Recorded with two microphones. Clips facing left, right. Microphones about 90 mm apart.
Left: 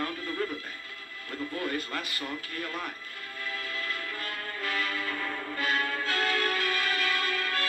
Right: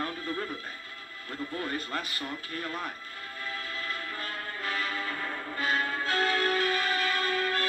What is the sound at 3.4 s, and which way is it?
Music, 25° right (ahead or behind).